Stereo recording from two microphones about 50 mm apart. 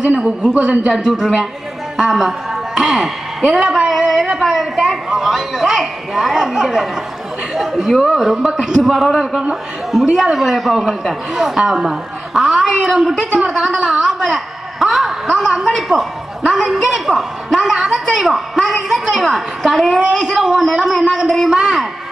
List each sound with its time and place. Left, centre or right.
0.1 s a man's voice: right
0.5 s a woman's voice: centre